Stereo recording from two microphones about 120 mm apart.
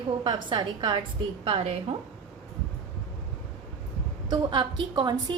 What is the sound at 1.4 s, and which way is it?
Speech, 50° right (ahead or behind).